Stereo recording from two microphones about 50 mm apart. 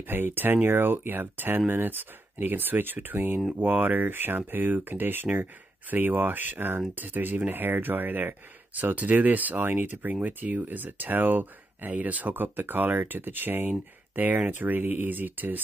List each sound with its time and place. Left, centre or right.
0.1 s speech: right